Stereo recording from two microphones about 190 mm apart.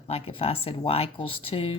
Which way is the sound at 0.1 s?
30° left (ahead or behind).